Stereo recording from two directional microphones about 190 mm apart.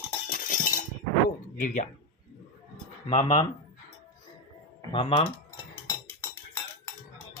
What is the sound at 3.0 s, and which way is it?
Speech, 25° left (ahead or behind).